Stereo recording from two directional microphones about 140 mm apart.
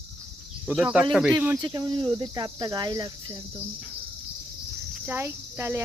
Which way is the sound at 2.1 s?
30° right (ahead or behind).